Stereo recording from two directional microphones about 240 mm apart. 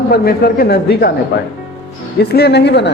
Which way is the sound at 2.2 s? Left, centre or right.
Left.